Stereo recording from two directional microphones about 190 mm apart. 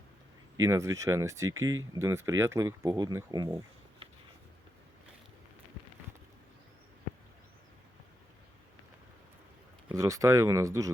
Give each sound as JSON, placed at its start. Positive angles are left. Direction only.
{"t": 0.6, "sound": "speech", "side_deg": -15}
{"t": 9.9, "sound": "speech", "side_deg": -15}